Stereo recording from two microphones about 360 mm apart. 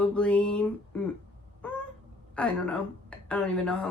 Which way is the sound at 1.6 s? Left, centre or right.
Centre.